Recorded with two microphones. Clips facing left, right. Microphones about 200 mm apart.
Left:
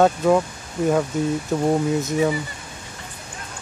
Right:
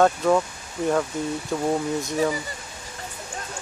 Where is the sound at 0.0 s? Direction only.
5° left (ahead or behind).